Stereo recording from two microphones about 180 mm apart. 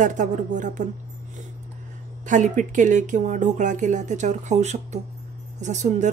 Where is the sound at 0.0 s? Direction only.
45° right (ahead or behind).